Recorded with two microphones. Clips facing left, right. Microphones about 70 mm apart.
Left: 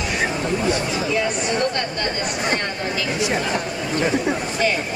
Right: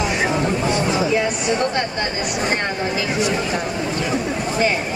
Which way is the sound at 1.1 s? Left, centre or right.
Centre.